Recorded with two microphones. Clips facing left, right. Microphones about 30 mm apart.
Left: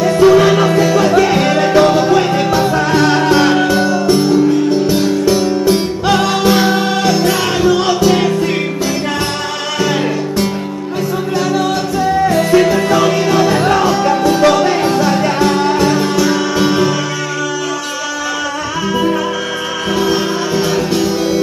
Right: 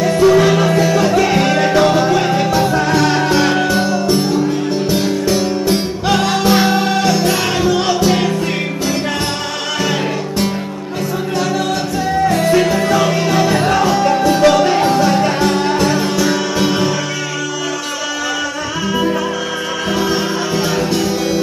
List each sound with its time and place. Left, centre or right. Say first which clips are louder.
0.2 s music: left 3 dB; centre
9.8 s music: left 3 dB; centre
19.9 s music: left 3 dB; centre